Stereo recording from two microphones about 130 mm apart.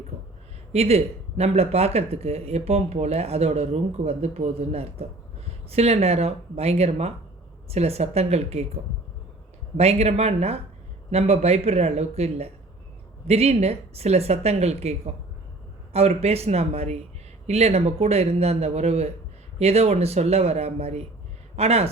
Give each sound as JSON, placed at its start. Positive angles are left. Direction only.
{"t": 0.7, "sound": "speech", "side_deg": -50}